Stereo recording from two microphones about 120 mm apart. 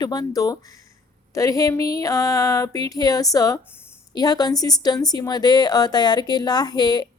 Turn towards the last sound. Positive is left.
turn(degrees=35)  # may be behind; listen again after turning